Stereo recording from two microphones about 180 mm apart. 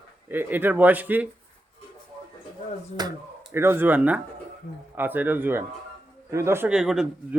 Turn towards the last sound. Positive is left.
turn(degrees=-5)  # may be behind; listen again after turning